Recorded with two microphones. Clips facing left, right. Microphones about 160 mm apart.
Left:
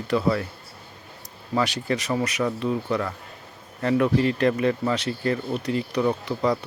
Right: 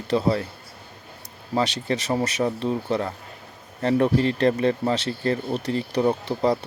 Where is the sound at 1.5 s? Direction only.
25° right (ahead or behind).